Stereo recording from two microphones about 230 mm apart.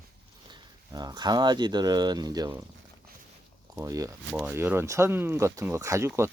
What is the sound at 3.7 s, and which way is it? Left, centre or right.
Speech, centre.